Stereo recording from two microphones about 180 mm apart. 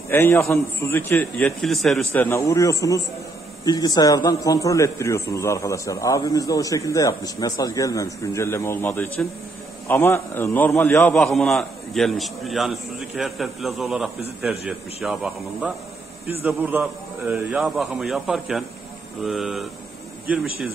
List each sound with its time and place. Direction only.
0.1 s a man's voice: 10° left (ahead or behind)
2.1 s a man's voice: 15° left (ahead or behind)
11.1 s a man's voice: centre (ahead or behind)